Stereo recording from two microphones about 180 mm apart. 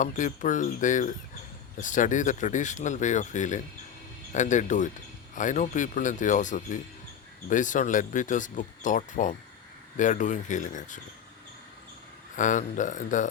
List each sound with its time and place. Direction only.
0.0 s speech: 45° left (ahead or behind)
12.4 s speech: 45° left (ahead or behind)